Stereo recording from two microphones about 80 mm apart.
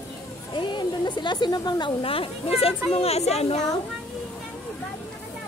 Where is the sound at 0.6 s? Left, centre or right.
Left.